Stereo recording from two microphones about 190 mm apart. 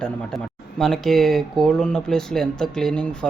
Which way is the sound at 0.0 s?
5° left (ahead or behind).